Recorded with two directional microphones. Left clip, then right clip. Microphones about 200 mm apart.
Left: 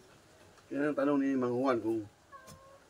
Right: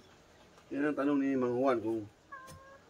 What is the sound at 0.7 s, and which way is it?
Speech, 20° left (ahead or behind).